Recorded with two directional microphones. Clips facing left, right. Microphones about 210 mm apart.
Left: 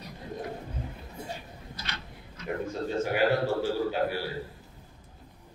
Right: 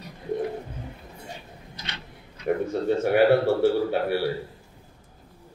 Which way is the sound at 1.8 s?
20° right (ahead or behind).